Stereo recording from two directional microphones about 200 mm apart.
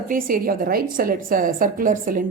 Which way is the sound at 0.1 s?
45° right (ahead or behind).